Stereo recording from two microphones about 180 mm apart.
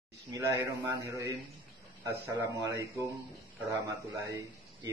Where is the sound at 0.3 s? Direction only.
15° right (ahead or behind).